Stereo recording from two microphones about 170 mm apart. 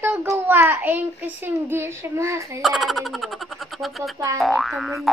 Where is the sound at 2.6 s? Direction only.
Centre (ahead or behind).